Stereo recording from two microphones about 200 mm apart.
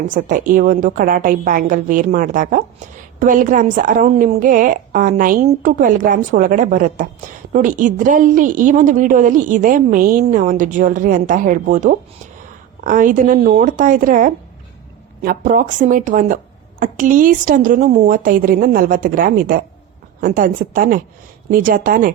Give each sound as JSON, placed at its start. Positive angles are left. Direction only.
{"t": 0.1, "sound": "a woman's voice", "side_deg": -40}